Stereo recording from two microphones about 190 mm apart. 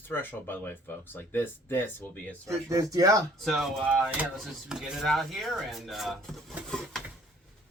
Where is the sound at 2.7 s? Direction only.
20° right (ahead or behind).